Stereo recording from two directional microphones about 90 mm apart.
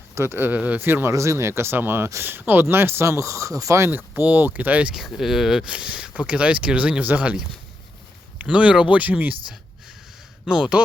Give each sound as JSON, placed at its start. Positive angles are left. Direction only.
{"t": 0.1, "sound": "speech", "side_deg": -30}
{"t": 3.9, "sound": "speech", "side_deg": -20}
{"t": 4.9, "sound": "speech", "side_deg": -5}
{"t": 10.4, "sound": "speech", "side_deg": -5}